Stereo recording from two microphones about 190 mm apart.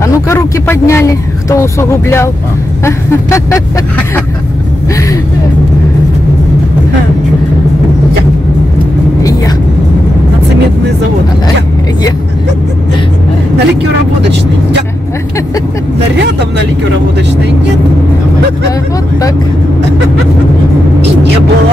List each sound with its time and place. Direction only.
0.0 s speech: 15° left (ahead or behind)
16.2 s speech: 65° right (ahead or behind)